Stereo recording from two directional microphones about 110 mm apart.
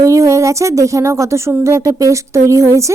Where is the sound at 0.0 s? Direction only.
30° right (ahead or behind).